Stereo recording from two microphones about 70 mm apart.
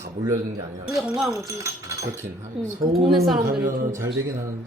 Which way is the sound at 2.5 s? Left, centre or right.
Centre.